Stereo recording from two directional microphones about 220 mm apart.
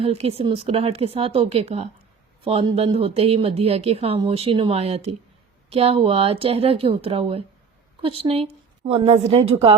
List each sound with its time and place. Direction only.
0.0 s speech: 25° right (ahead or behind)